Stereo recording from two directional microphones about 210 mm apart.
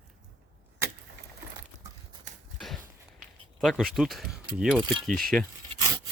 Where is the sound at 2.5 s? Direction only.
Centre (ahead or behind).